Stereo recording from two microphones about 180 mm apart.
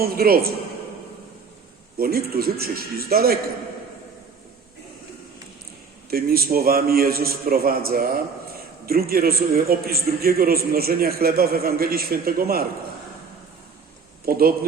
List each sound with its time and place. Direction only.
0.0 s a man's voice: 55° right (ahead or behind)
2.0 s a man's voice: 55° right (ahead or behind)
6.1 s a man's voice: 55° right (ahead or behind)
14.3 s a man's voice: 55° right (ahead or behind)